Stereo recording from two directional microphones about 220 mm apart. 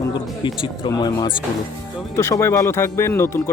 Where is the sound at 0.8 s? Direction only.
20° left (ahead or behind).